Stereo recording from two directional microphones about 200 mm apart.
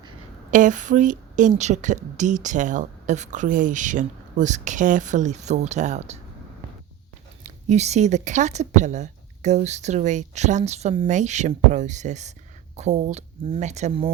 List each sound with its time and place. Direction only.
0.5 s speech: 40° right (ahead or behind)
7.4 s speech: 35° right (ahead or behind)